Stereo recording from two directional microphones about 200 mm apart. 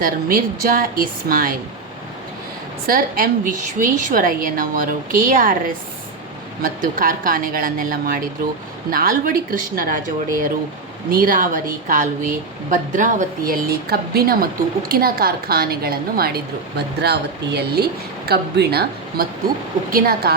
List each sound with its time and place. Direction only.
0.0 s speech: 45° right (ahead or behind)
2.8 s speech: 45° right (ahead or behind)
11.1 s speech: 45° right (ahead or behind)